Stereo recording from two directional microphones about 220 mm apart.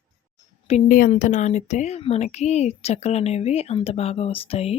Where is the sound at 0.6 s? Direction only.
35° left (ahead or behind).